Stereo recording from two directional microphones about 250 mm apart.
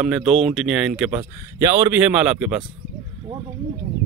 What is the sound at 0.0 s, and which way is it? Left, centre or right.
Speech, centre.